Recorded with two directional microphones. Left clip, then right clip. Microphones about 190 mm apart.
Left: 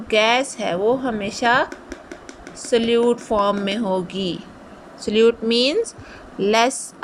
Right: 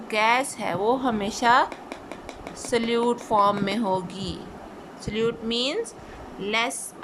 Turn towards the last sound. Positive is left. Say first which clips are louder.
# left 8 dB
turn(degrees=25)  # may be behind; listen again after turning